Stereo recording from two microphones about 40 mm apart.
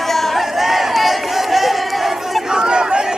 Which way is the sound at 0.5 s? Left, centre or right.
Centre.